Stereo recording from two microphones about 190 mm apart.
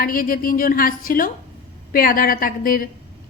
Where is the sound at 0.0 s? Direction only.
50° left (ahead or behind).